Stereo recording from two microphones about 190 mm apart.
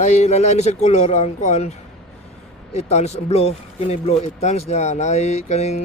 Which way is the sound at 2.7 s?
35° left (ahead or behind).